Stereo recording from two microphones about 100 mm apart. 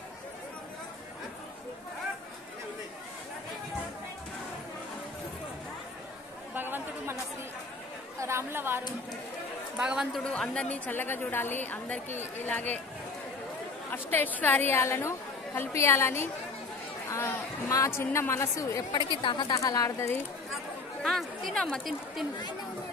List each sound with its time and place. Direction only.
6.5 s chatter: 20° right (ahead or behind)
8.2 s chatter: 25° right (ahead or behind)
9.8 s speech: 5° right (ahead or behind)
10.3 s a woman's voice: 10° left (ahead or behind)
13.8 s a woman's voice: 20° left (ahead or behind)
18.9 s a woman's voice: 50° left (ahead or behind)
19.5 s speech: 35° left (ahead or behind)
21.0 s speech: centre (ahead or behind)